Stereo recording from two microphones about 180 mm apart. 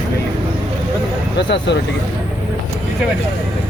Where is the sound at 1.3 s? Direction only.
75° left (ahead or behind).